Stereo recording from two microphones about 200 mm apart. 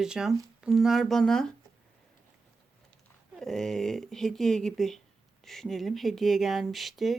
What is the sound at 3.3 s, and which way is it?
Speech, centre (ahead or behind).